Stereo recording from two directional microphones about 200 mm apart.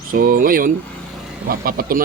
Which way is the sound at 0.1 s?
45° right (ahead or behind).